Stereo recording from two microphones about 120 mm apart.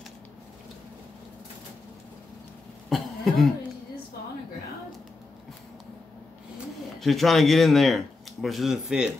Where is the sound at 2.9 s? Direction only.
Centre (ahead or behind).